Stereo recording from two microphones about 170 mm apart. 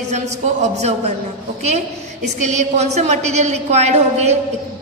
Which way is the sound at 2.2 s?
40° right (ahead or behind).